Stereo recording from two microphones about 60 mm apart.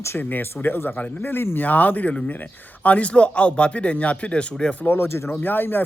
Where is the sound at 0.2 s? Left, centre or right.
Left.